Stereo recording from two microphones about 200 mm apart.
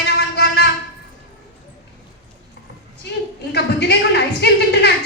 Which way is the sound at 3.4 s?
55° left (ahead or behind).